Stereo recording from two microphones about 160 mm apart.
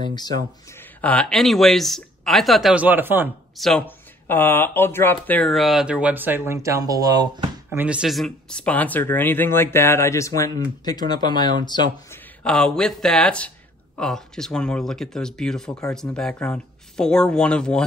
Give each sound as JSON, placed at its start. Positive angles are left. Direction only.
{"t": 0.0, "sound": "speech", "side_deg": 25}
{"t": 0.7, "sound": "speech", "side_deg": 10}
{"t": 3.5, "sound": "speech", "side_deg": 0}
{"t": 3.8, "sound": "speech", "side_deg": 10}
{"t": 7.7, "sound": "speech", "side_deg": -10}
{"t": 12.1, "sound": "speech", "side_deg": 5}